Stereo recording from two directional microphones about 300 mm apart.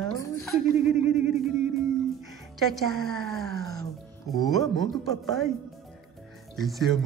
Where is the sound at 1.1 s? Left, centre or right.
Right.